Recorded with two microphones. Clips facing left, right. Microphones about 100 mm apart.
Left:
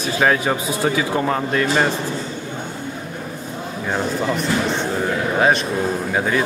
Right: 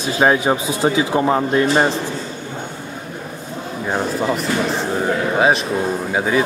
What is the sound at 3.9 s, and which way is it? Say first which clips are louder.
Speech: right 2 dB; 5° right (ahead or behind).